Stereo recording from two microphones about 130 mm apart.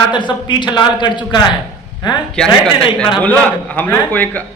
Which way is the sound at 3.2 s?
10° left (ahead or behind).